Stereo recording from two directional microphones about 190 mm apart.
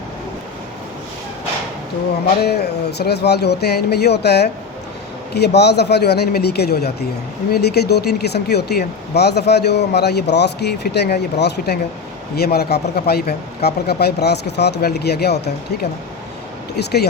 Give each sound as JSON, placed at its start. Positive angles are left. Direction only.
{"t": 2.4, "sound": "speech", "side_deg": 55}
{"t": 16.7, "sound": "speech", "side_deg": 60}